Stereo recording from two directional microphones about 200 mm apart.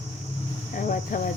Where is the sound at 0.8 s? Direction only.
40° left (ahead or behind).